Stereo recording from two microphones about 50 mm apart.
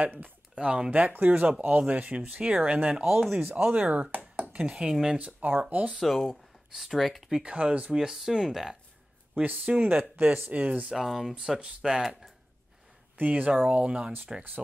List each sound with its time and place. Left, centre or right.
0.0 s speech: right
0.6 s speech: centre
3.1 s speech: centre
3.4 s speech: right
6.7 s speech: centre
7.2 s speech: centre
7.5 s speech: right; by 8.7 s centre
9.4 s speech: right
10.9 s speech: centre
13.2 s speech: right